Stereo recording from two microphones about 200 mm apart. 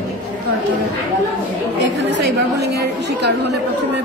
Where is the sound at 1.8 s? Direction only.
55° right (ahead or behind).